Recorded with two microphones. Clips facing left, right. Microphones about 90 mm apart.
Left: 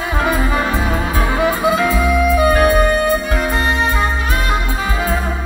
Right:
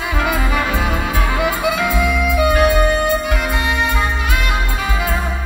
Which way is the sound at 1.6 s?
35° left (ahead or behind).